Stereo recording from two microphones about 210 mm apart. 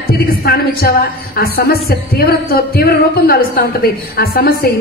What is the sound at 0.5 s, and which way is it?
A woman's voice, 45° left (ahead or behind).